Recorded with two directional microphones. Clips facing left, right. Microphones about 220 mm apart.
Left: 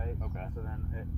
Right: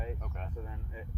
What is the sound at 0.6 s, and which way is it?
Speech, 15° right (ahead or behind).